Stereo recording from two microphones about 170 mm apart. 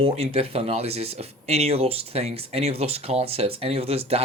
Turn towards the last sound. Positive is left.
turn(degrees=-35)  # may be behind; listen again after turning